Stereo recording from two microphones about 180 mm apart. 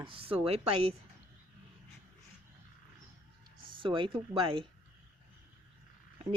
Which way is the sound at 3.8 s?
30° right (ahead or behind).